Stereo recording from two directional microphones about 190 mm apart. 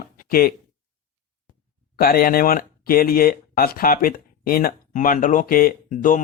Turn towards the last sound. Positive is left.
turn(degrees=45)  # may be behind; listen again after turning